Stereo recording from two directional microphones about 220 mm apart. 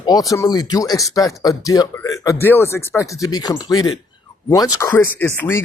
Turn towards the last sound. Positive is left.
turn(degrees=10)  # may be behind; listen again after turning